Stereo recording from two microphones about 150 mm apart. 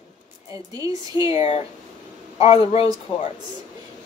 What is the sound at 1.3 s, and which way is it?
Speech, 45° left (ahead or behind).